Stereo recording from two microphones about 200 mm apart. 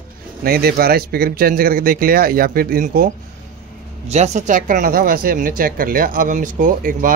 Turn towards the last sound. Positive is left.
turn(degrees=-40)  # may be behind; listen again after turning